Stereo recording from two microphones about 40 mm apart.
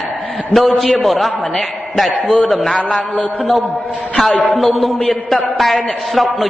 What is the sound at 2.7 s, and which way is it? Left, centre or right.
Speech, left.